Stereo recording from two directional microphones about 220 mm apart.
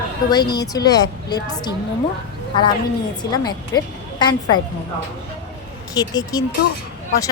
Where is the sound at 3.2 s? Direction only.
20° left (ahead or behind).